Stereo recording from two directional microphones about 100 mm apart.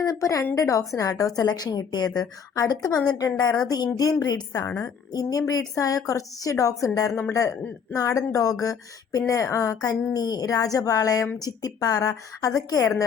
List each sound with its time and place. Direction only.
0.0 s speech: 35° left (ahead or behind)